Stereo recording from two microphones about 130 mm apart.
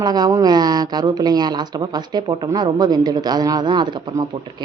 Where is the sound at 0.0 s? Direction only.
30° right (ahead or behind).